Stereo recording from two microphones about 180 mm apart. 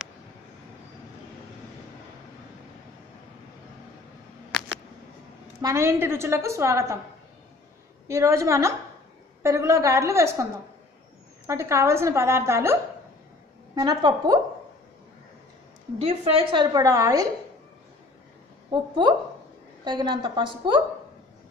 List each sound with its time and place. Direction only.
5.6 s a woman's voice: 15° right (ahead or behind)
8.1 s a woman's voice: 15° right (ahead or behind)
13.7 s a woman's voice: 25° right (ahead or behind)
16.0 s a woman's voice: 35° right (ahead or behind); by 17.3 s 20° right (ahead or behind)
18.7 s a woman's voice: 25° right (ahead or behind)